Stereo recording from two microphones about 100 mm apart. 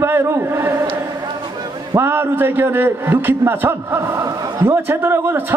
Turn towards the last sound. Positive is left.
turn(degrees=-25)  # may be behind; listen again after turning